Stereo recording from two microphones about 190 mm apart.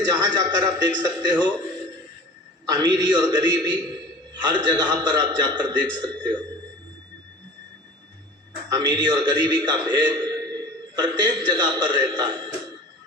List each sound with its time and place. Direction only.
0.1 s a man's voice: 20° right (ahead or behind)
2.6 s a man's voice: 20° right (ahead or behind)
8.7 s a man's voice: 25° right (ahead or behind)